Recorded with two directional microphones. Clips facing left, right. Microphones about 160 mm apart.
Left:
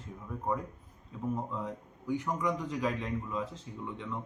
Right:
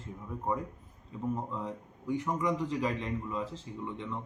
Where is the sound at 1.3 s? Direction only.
Centre (ahead or behind).